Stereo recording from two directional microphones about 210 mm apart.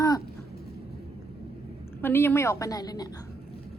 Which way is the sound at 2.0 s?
10° left (ahead or behind).